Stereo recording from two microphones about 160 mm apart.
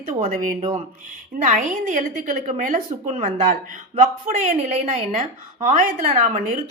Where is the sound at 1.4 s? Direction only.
55° right (ahead or behind).